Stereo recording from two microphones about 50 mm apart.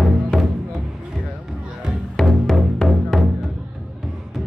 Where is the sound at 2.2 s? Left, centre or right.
Centre.